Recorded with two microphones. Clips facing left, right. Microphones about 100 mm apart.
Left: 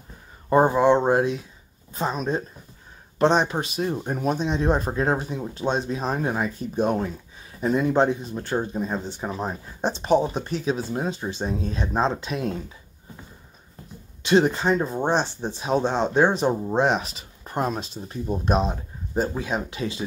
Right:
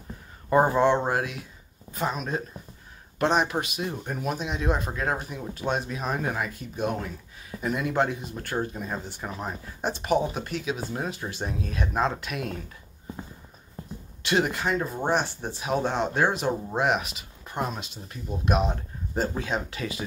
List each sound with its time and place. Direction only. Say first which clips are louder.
0.5 s speech: left 3 dB; 25° left (ahead or behind)
11.0 s speech: left 4 dB; 20° left (ahead or behind)
14.2 s speech: left 6 dB; 25° left (ahead or behind)
18.7 s speech: left 1 dB; 15° left (ahead or behind)